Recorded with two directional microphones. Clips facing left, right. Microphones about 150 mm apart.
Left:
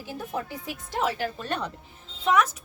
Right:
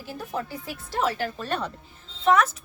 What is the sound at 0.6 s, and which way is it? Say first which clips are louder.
A woman's voice: right 2 dB; 15° left (ahead or behind).